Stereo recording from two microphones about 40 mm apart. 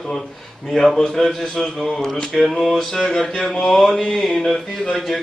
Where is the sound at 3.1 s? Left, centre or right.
Centre.